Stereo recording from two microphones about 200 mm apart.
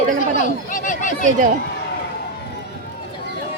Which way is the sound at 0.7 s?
40° left (ahead or behind).